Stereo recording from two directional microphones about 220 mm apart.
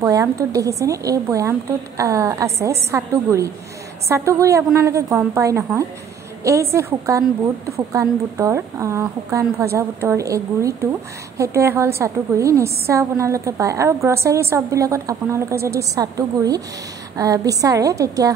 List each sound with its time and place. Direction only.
0.0 s a woman's voice: 15° right (ahead or behind)